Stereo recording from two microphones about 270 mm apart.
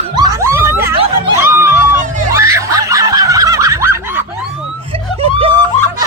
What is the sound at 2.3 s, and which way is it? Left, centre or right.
Snicker, centre.